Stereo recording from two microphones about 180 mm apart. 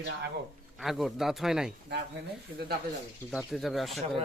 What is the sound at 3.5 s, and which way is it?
Speech, centre (ahead or behind).